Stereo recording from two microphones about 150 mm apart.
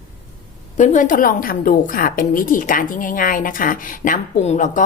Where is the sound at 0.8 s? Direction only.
55° left (ahead or behind).